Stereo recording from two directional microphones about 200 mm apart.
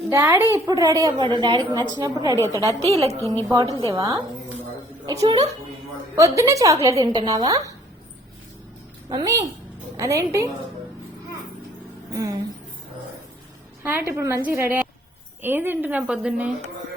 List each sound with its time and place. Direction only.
0.1 s a woman's voice: 15° right (ahead or behind)
2.3 s a woman's voice: 15° left (ahead or behind)
3.8 s a woman's voice: 15° right (ahead or behind)
9.0 s a woman's voice: 20° right (ahead or behind)
12.1 s a woman's voice: 15° right (ahead or behind)
13.8 s a woman's voice: 10° right (ahead or behind)